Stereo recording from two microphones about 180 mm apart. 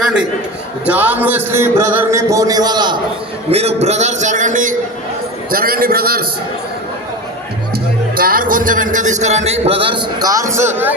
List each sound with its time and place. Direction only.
0.9 s a man's voice: 10° right (ahead or behind)
3.5 s a man's voice: 35° right (ahead or behind); by 6.2 s 55° right (ahead or behind)
7.7 s a man's voice: 55° right (ahead or behind); by 10.9 s 10° right (ahead or behind)